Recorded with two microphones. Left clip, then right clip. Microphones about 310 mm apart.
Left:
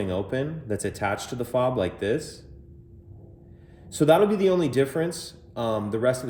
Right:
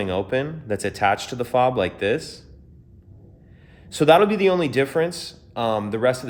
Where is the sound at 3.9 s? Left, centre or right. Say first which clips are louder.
Right 4 dB; centre.